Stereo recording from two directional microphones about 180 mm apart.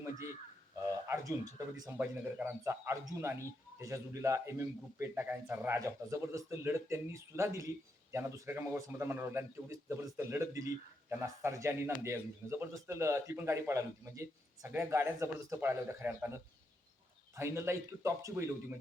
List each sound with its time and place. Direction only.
0.8 s speech: 15° right (ahead or behind)